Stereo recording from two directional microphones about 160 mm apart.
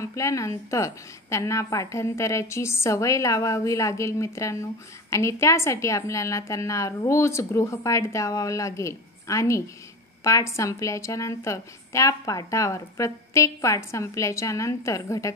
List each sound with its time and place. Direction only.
0.0 s a woman's voice: 20° left (ahead or behind)